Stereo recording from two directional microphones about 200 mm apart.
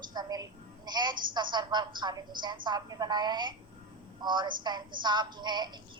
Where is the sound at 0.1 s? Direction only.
20° right (ahead or behind).